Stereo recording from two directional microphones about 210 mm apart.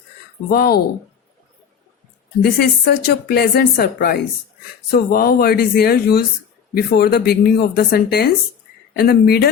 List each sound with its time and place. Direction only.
0.5 s speech: 45° left (ahead or behind)
2.4 s speech: 45° left (ahead or behind)